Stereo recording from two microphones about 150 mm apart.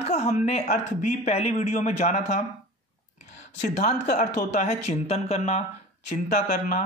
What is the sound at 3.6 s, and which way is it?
Speech, 50° left (ahead or behind).